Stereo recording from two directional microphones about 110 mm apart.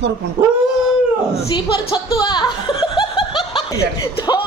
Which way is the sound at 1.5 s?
35° left (ahead or behind).